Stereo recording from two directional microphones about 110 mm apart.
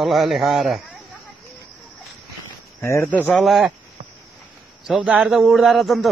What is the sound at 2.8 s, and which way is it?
Speech, 20° left (ahead or behind).